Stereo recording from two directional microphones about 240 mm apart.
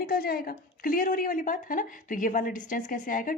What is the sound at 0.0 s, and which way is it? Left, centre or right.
A woman's voice, left.